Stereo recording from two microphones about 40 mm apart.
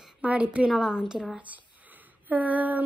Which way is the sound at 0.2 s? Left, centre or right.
Right.